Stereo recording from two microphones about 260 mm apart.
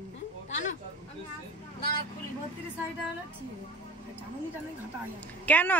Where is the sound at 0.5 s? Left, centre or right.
Left.